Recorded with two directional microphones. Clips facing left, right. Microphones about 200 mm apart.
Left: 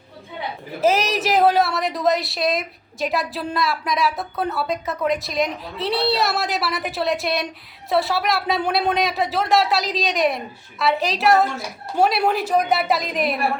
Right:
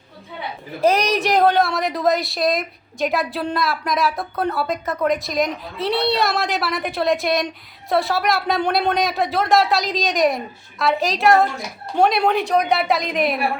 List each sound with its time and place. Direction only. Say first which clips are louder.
0.8 s a woman's voice: right 2 dB; 5° left (ahead or behind)